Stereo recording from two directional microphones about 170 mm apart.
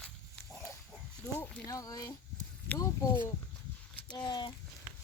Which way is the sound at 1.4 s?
20° left (ahead or behind).